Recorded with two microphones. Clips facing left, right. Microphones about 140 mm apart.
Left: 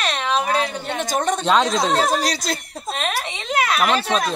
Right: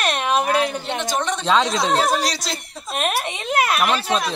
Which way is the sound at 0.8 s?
45° left (ahead or behind).